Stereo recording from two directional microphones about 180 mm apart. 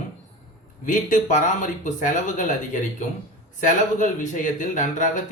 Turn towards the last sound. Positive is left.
turn(degrees=45)  # may be behind; listen again after turning